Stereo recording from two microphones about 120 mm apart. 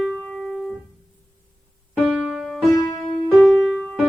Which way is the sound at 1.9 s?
5° right (ahead or behind).